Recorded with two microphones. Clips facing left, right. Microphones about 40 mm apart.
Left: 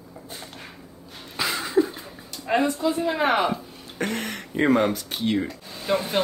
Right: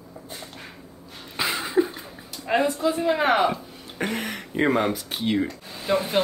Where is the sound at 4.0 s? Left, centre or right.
Centre.